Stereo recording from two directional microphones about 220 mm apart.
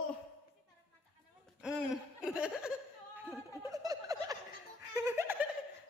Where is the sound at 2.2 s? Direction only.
5° right (ahead or behind).